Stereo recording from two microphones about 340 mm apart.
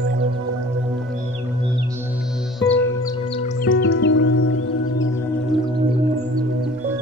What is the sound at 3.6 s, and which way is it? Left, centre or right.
Music, left.